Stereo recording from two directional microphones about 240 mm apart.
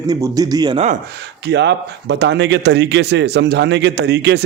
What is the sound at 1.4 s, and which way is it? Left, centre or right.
Speech, right.